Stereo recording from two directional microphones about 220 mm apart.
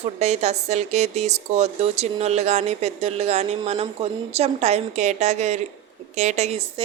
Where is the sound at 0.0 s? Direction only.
30° right (ahead or behind).